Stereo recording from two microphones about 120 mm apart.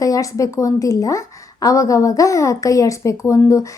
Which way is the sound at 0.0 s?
30° left (ahead or behind).